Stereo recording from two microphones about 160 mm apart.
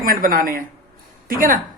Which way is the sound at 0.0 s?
60° right (ahead or behind).